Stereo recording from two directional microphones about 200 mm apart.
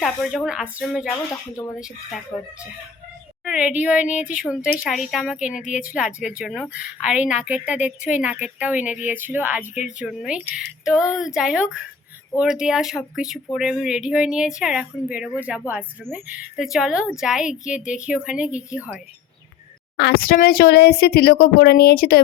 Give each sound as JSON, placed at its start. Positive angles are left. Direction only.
{"t": 0.0, "sound": "a woman's voice", "side_deg": 0}
{"t": 1.3, "sound": "speech", "side_deg": 15}
{"t": 3.4, "sound": "a woman's voice", "side_deg": -5}
{"t": 20.0, "sound": "speech", "side_deg": 50}